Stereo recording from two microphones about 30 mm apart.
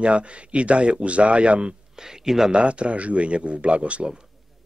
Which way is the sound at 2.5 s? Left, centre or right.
Right.